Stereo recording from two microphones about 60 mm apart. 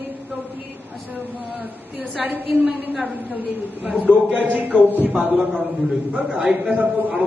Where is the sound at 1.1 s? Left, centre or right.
Right.